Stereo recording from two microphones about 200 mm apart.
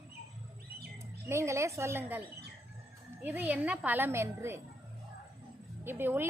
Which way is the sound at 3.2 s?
10° right (ahead or behind).